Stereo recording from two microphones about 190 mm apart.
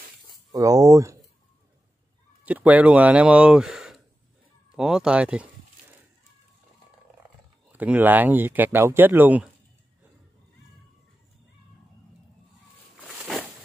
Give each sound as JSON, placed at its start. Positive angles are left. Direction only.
{"t": 0.5, "sound": "speech", "side_deg": -20}
{"t": 2.4, "sound": "speech", "side_deg": -10}
{"t": 7.7, "sound": "speech", "side_deg": -10}
{"t": 13.2, "sound": "a sound", "side_deg": -5}